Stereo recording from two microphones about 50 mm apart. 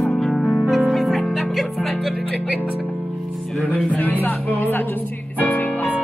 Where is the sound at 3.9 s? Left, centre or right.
Left.